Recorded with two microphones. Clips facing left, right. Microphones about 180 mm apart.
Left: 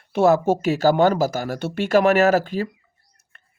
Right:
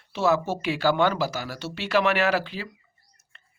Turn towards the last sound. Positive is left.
turn(degrees=55)  # may be behind; listen again after turning